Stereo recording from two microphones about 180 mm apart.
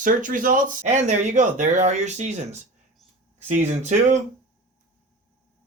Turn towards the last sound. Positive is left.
turn(degrees=-40)  # may be behind; listen again after turning